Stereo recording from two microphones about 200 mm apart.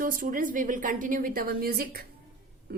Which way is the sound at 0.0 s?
45° right (ahead or behind).